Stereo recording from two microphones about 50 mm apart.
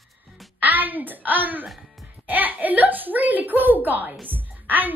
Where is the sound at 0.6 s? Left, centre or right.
Right.